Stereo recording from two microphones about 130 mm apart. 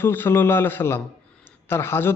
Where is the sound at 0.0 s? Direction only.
15° left (ahead or behind).